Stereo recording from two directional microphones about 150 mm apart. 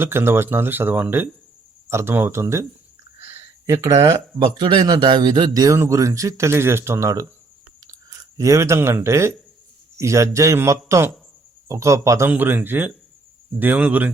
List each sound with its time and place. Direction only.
0.0 s speech: 15° right (ahead or behind)
3.7 s a man's voice: 25° right (ahead or behind)
8.4 s a man's voice: 20° right (ahead or behind)